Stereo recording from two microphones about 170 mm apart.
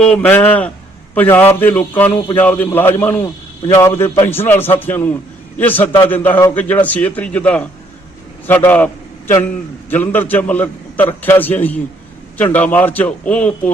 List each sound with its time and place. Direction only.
0.0 s a man's voice: 10° left (ahead or behind)